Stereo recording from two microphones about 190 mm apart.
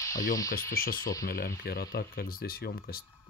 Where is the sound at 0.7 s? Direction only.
50° left (ahead or behind).